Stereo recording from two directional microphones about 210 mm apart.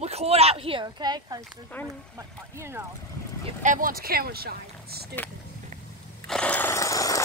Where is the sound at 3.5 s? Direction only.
40° right (ahead or behind).